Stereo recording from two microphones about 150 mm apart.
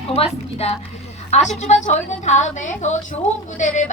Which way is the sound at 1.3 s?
50° left (ahead or behind).